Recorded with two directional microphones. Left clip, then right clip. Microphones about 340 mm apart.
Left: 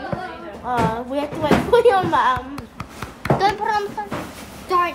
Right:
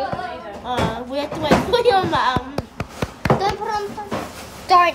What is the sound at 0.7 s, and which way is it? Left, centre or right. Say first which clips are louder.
A woman's voice: left 2 dB; centre.